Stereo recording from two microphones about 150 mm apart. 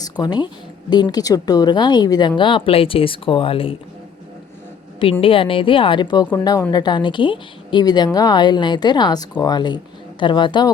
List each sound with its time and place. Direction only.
0.0 s a woman's voice: 25° left (ahead or behind)
5.2 s a woman's voice: 35° left (ahead or behind)